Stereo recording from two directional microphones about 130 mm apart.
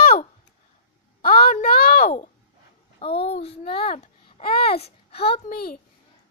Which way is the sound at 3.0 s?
50° left (ahead or behind).